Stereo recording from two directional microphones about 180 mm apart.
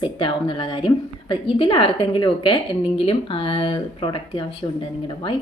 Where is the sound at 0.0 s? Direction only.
30° left (ahead or behind).